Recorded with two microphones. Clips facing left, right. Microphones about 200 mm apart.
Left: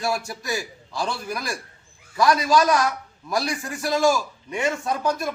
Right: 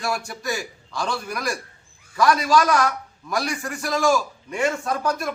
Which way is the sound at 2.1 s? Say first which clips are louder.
Even; 25° left (ahead or behind).